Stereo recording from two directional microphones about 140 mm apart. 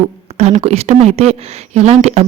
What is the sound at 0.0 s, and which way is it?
A woman's voice, 50° right (ahead or behind).